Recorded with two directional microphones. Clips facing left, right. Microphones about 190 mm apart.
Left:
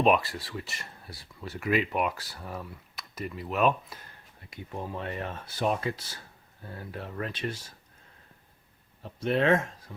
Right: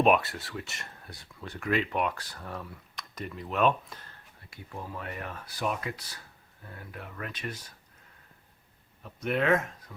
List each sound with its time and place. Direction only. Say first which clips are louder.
0.0 s speech: even; centre (ahead or behind)
4.4 s speech: left 4 dB; 20° left (ahead or behind)
9.0 s speech: left 2 dB; 30° left (ahead or behind)